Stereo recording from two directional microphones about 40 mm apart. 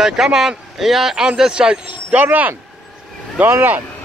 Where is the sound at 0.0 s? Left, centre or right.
Centre.